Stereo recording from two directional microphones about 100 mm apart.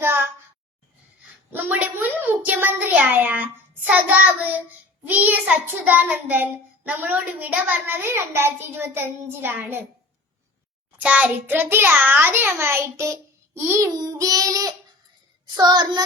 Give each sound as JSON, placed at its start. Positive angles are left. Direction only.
{"t": 1.5, "sound": "a sound", "side_deg": -20}
{"t": 3.9, "sound": "child singing", "side_deg": -15}
{"t": 10.9, "sound": "child singing", "side_deg": -15}